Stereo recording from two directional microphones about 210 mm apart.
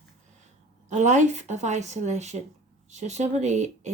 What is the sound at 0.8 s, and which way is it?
Speech, 35° right (ahead or behind).